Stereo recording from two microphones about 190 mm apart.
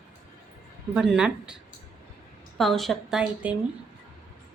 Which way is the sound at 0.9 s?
5° right (ahead or behind).